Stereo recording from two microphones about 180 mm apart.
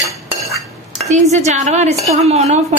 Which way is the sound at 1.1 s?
40° right (ahead or behind).